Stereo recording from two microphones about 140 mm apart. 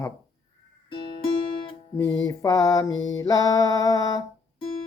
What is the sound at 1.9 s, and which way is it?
Speech, 25° left (ahead or behind).